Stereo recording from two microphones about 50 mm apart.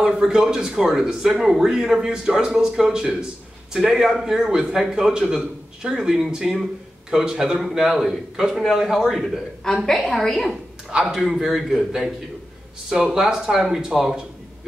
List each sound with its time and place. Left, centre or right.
0.3 s a man's voice: centre
10.9 s a man's voice: centre